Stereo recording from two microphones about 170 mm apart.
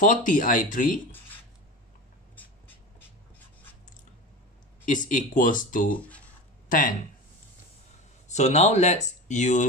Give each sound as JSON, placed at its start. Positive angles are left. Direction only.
{"t": 0.0, "sound": "speech", "side_deg": 50}
{"t": 4.8, "sound": "speech", "side_deg": 50}
{"t": 5.9, "sound": "speech", "side_deg": 10}
{"t": 6.7, "sound": "speech", "side_deg": 50}
{"t": 8.3, "sound": "speech", "side_deg": 40}